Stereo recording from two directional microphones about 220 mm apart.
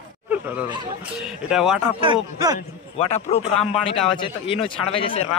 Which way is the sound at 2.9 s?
30° left (ahead or behind).